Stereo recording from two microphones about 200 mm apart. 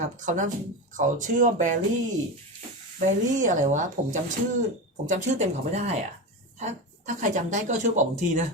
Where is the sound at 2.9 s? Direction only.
40° right (ahead or behind).